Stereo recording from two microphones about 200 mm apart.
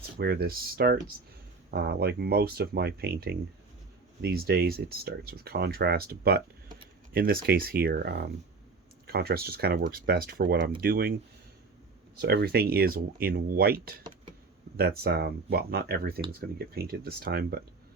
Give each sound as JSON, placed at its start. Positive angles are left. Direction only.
{"t": 0.2, "sound": "speech", "side_deg": -50}
{"t": 12.1, "sound": "speech", "side_deg": -55}